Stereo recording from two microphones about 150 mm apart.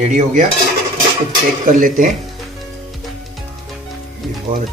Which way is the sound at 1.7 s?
60° right (ahead or behind).